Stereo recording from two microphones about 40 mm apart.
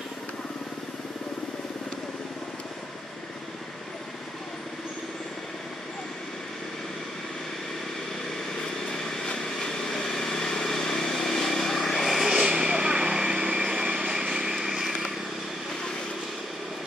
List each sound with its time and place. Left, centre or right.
9.2 s vehicle: centre
12.4 s vehicle: centre